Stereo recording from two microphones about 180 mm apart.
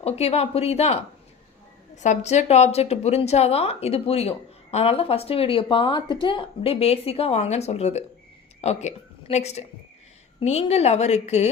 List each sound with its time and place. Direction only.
0.0 s a woman's voice: 35° left (ahead or behind)
2.0 s a woman's voice: 40° left (ahead or behind)